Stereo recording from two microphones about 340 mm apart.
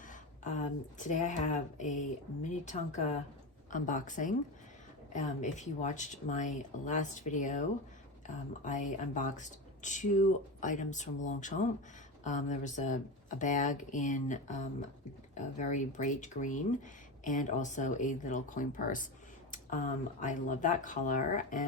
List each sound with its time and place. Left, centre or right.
0.1 s speech: left